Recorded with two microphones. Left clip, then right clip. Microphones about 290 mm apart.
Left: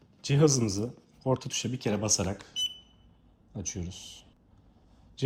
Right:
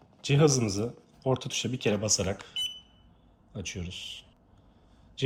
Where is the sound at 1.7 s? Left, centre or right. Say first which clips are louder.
Right 4 dB; centre.